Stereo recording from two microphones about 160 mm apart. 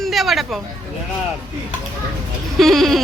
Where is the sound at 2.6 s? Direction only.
Centre (ahead or behind).